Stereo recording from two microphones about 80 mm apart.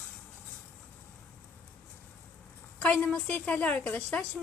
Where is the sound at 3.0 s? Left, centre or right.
Centre.